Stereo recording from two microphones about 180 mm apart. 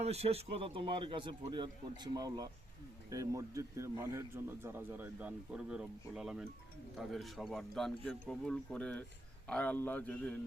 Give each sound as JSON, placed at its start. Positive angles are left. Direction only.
{"t": 0.0, "sound": "a man's voice", "side_deg": -35}